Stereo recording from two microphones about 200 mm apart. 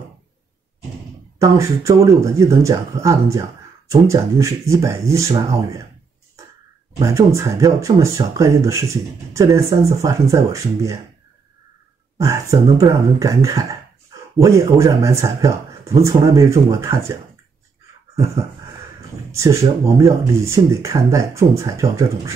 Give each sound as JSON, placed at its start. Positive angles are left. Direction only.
{"t": 1.4, "sound": "speech", "side_deg": -15}
{"t": 7.0, "sound": "speech", "side_deg": -15}
{"t": 12.2, "sound": "speech", "side_deg": -15}
{"t": 18.1, "sound": "a sound", "side_deg": -15}
{"t": 19.3, "sound": "speech", "side_deg": -15}